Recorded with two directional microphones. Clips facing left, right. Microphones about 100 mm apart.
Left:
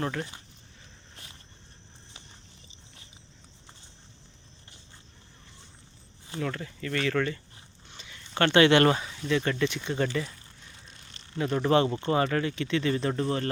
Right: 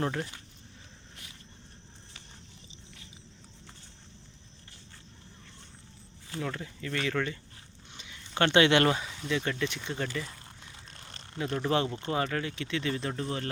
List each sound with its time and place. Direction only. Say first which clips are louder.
0.0 s speech: even; 20° right (ahead or behind)
6.4 s speech: left 3 dB; 10° right (ahead or behind)
7.9 s a sound: left 1 dB; 10° right (ahead or behind)
8.9 s speech: left 4 dB; 5° right (ahead or behind)
11.4 s speech: left 5 dB; 15° left (ahead or behind)
12.1 s speech: left 4 dB; centre (ahead or behind)